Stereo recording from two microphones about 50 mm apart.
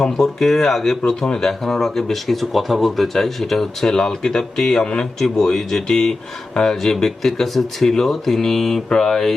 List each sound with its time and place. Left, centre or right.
0.0 s speech: centre